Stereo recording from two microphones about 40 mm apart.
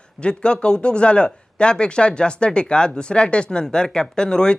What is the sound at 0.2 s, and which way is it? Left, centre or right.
Speech, left.